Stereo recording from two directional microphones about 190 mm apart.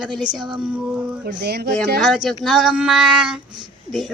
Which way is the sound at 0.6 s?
10° right (ahead or behind).